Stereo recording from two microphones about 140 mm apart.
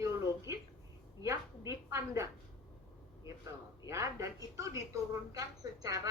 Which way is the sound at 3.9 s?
20° right (ahead or behind).